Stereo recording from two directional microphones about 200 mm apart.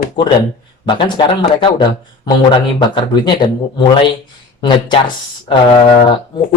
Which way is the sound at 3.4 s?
25° left (ahead or behind).